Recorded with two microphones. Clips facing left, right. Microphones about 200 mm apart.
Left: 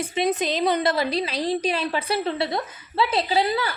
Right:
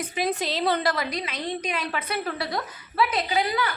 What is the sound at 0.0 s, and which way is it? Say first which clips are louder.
A woman's voice: left 4 dB; 25° left (ahead or behind).